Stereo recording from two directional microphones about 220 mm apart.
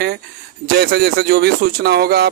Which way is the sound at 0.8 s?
45° right (ahead or behind).